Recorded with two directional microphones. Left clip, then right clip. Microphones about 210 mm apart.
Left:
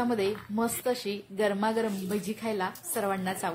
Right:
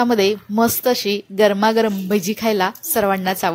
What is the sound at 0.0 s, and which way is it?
Speech, 40° right (ahead or behind).